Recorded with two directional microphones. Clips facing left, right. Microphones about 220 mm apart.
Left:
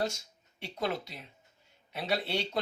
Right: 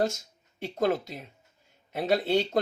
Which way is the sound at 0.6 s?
45° right (ahead or behind).